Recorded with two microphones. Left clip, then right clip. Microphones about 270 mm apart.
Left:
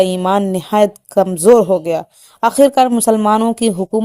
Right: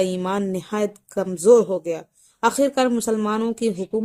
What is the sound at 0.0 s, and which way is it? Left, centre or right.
Speech, left.